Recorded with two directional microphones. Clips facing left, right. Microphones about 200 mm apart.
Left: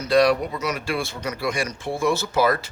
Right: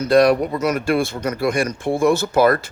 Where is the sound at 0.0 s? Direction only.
50° right (ahead or behind).